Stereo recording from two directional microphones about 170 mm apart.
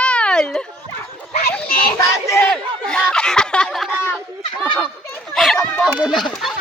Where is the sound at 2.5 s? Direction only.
5° left (ahead or behind).